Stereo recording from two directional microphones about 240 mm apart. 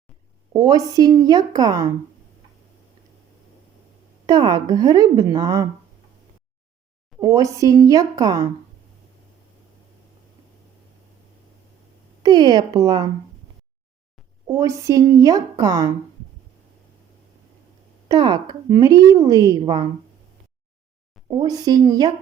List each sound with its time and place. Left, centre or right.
0.5 s a woman's voice: centre
4.3 s a woman's voice: centre
7.2 s a woman's voice: centre
12.2 s a woman's voice: centre
14.4 s a woman's voice: centre
18.1 s a woman's voice: centre
21.2 s a woman's voice: centre